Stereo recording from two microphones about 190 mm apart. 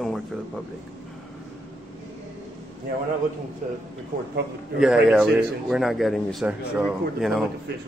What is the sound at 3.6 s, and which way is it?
Speech, 40° right (ahead or behind).